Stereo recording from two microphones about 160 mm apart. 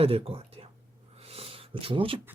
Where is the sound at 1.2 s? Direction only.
40° right (ahead or behind).